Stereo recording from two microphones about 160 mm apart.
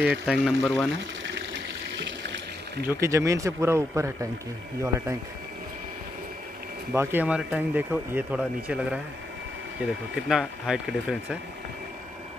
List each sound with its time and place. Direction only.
0.0 s speech: centre (ahead or behind)
2.9 s speech: 15° right (ahead or behind)
6.9 s speech: 15° right (ahead or behind)
10.1 s speech: centre (ahead or behind)